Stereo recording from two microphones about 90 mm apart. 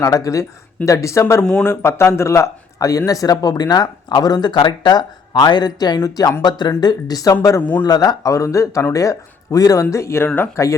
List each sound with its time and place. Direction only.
0.0 s speech: 35° left (ahead or behind)